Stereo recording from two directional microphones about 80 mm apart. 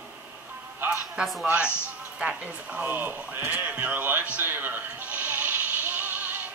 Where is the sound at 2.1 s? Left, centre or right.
Centre.